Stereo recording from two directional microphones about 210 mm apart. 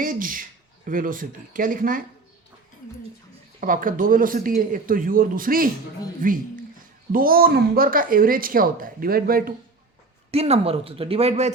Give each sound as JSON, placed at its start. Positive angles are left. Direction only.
{"t": 0.0, "sound": "a man's voice", "side_deg": -40}
{"t": 3.6, "sound": "a man's voice", "side_deg": -40}
{"t": 10.3, "sound": "speech", "side_deg": -30}